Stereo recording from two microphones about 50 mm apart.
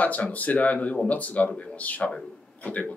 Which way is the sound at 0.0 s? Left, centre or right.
Left.